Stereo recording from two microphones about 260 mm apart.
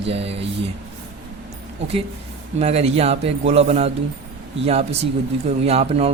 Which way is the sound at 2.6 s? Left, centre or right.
Right.